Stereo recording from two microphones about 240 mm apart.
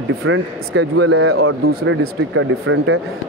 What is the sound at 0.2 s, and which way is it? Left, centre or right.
Speech, right.